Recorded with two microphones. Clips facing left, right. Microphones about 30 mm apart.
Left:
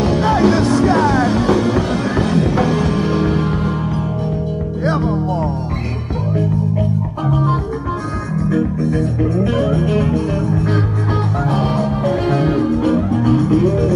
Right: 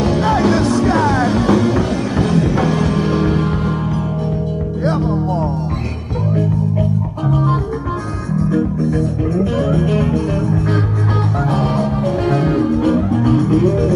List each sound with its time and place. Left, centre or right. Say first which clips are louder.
0.0 s music: left 1 dB; centre
4.8 s music: even; centre
7.2 s music: right 1 dB; centre
8.5 s music: left 1 dB; left
9.6 s music: even; centre